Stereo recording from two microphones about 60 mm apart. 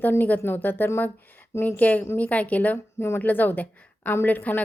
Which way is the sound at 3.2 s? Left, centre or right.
Left.